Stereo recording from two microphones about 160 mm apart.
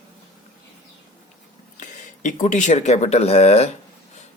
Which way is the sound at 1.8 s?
50° left (ahead or behind).